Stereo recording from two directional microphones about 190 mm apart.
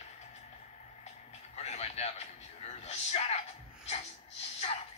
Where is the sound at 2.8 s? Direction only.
35° left (ahead or behind).